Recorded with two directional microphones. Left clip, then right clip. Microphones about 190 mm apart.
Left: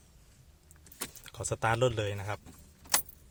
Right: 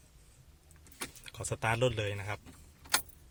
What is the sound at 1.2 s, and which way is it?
Speech, 15° left (ahead or behind).